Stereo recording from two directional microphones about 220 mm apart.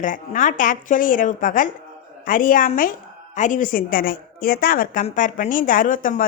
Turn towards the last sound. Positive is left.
turn(degrees=40)  # may be behind; listen again after turning